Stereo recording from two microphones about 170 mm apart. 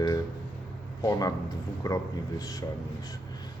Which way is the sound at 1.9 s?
20° left (ahead or behind).